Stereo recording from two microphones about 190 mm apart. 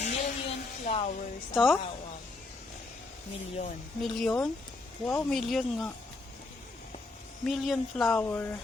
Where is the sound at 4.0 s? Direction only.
Centre (ahead or behind).